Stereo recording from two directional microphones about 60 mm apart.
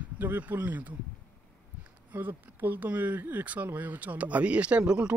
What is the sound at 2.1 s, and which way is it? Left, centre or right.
Speech, right.